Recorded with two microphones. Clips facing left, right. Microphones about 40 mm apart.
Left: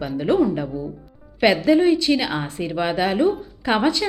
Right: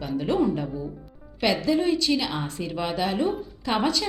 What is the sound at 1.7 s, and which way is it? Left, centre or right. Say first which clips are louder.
A woman's voice: left 6 dB; left.